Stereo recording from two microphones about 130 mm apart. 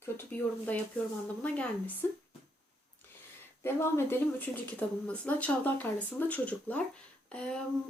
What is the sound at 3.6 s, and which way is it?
Speech, 15° left (ahead or behind).